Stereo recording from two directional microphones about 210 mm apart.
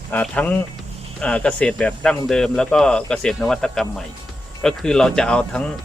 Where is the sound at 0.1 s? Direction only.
5° left (ahead or behind).